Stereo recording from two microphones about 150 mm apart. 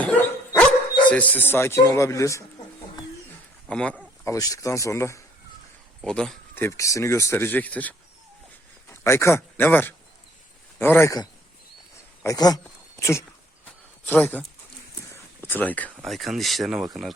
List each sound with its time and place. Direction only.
0.0 s dog: 10° left (ahead or behind)
1.1 s speech: 10° left (ahead or behind)
3.7 s speech: 5° left (ahead or behind)
4.2 s speech: 20° left (ahead or behind)
6.0 s a man's voice: 5° left (ahead or behind)
12.2 s speech: 25° left (ahead or behind)
13.7 s a sound: 10° left (ahead or behind)
15.9 s speech: centre (ahead or behind)